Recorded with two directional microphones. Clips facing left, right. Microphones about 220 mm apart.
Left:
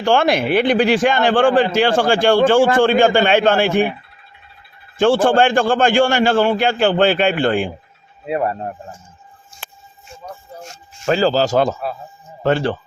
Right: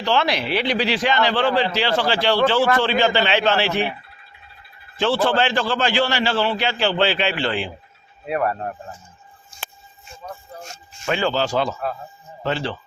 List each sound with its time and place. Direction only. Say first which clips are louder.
0.0 s a man's voice: left 6 dB; 50° left (ahead or behind)
4.9 s a man's voice: left 6 dB; 50° left (ahead or behind)
8.3 s speech: left 2 dB; 20° left (ahead or behind)
11.0 s speech: left 6 dB; 35° left (ahead or behind)